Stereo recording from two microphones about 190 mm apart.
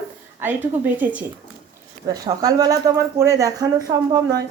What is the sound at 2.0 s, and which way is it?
Speech, 20° right (ahead or behind).